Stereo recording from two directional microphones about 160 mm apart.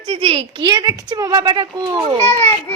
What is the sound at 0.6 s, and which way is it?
A child's voice, 25° right (ahead or behind).